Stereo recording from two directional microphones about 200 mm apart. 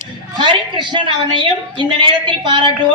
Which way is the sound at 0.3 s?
25° right (ahead or behind).